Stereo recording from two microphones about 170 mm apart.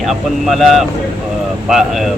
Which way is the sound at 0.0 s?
Centre (ahead or behind).